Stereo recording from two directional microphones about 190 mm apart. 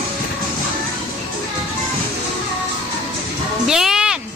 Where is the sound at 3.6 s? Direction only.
5° right (ahead or behind).